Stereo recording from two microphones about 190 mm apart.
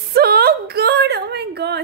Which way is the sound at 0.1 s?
55° right (ahead or behind).